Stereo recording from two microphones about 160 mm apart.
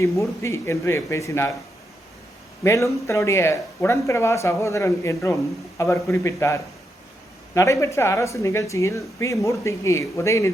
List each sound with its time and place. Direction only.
0.0 s speech: 15° left (ahead or behind)
2.6 s speech: 20° left (ahead or behind)